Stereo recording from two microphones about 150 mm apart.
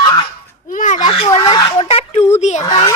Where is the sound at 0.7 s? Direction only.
60° left (ahead or behind).